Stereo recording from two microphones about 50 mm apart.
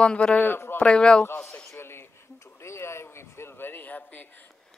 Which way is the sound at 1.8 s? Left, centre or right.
Left.